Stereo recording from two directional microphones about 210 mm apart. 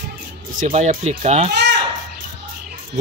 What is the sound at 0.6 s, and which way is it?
Speech, 35° right (ahead or behind).